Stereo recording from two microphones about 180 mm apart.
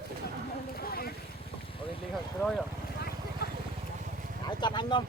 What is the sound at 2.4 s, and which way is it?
Speech, 5° left (ahead or behind).